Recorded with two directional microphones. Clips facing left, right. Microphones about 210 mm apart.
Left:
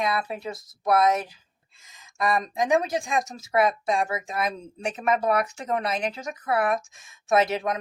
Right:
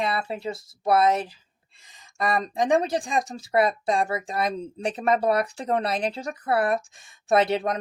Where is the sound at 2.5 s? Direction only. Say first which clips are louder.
Right 4 dB; 30° right (ahead or behind).